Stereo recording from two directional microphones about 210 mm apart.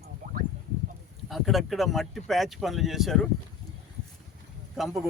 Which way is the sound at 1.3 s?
Centre (ahead or behind).